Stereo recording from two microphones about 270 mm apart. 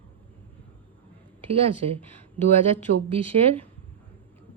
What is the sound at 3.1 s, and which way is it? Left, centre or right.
Speech, right.